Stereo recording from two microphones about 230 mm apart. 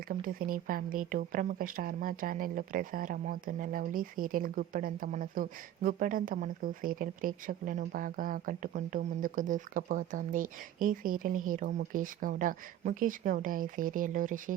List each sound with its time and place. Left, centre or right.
0.1 s speech: right